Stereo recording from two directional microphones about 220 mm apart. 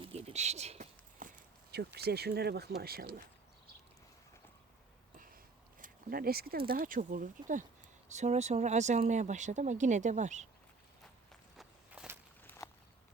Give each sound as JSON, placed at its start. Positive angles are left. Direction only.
{"t": 0.0, "sound": "a sound", "side_deg": -25}
{"t": 5.8, "sound": "speech", "side_deg": -40}
{"t": 11.5, "sound": "walk", "side_deg": -5}
{"t": 12.4, "sound": "walk", "side_deg": 10}